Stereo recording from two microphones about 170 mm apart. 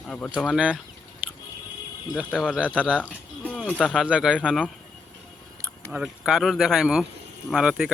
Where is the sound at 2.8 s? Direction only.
10° right (ahead or behind).